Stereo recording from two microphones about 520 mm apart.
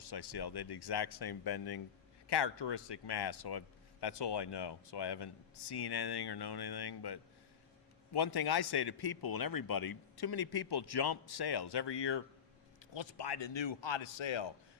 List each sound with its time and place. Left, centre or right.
0.0 s a man's voice: left